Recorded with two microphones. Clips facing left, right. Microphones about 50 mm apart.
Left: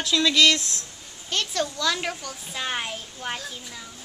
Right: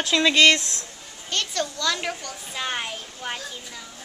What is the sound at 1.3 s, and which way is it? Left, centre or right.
A child's voice, centre.